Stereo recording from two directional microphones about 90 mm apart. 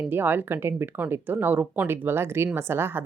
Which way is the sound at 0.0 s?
25° right (ahead or behind).